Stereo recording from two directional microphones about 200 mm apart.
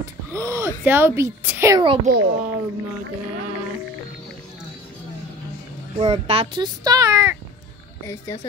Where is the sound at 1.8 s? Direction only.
25° right (ahead or behind).